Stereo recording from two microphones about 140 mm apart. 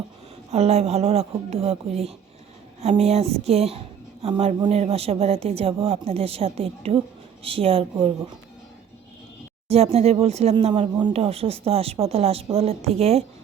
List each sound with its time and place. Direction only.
0.5 s a woman's voice: 50° right (ahead or behind)
9.6 s speech: 45° right (ahead or behind)